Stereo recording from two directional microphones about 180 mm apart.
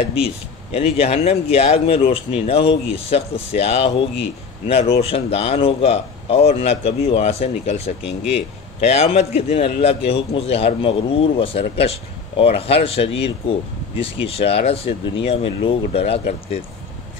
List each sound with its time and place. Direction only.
0.7 s speech: 35° left (ahead or behind)